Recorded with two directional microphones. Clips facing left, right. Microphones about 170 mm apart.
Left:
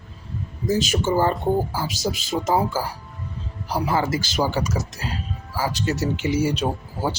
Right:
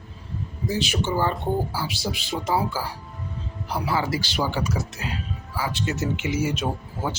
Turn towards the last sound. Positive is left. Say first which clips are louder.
# left 3 dB
turn(degrees=35)  # may be behind; listen again after turning